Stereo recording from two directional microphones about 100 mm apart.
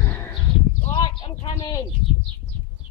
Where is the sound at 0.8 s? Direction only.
55° left (ahead or behind).